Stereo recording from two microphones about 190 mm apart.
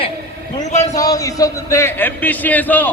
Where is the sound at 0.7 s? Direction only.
35° left (ahead or behind).